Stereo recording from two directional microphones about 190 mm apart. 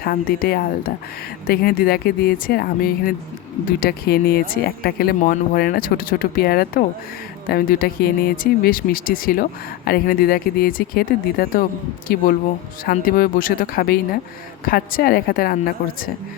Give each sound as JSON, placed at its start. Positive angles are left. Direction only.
{"t": 0.0, "sound": "speech", "side_deg": 50}